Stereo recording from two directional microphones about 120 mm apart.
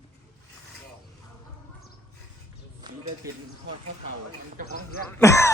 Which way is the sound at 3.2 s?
25° right (ahead or behind).